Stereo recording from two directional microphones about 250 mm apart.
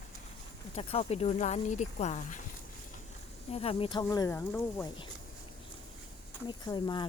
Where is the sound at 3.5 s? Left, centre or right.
Left.